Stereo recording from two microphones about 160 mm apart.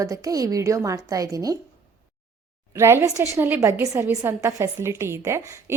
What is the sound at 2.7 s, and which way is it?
A woman's voice, 15° right (ahead or behind).